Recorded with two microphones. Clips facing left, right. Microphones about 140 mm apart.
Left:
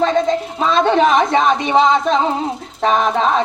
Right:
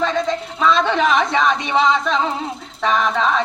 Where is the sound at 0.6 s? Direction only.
40° left (ahead or behind).